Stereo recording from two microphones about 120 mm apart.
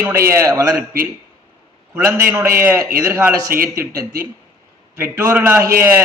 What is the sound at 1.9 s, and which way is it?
A man's voice, 20° right (ahead or behind).